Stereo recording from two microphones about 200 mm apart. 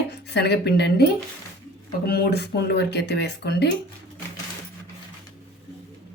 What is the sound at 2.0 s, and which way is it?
Speech, 55° left (ahead or behind).